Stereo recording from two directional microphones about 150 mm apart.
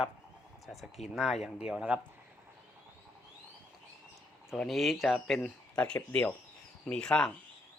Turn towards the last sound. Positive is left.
turn(degrees=5)  # may be behind; listen again after turning